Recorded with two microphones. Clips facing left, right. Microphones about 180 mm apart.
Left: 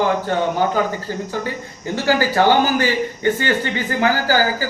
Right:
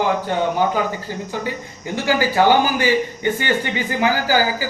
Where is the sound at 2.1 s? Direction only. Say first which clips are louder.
Even; 15° right (ahead or behind).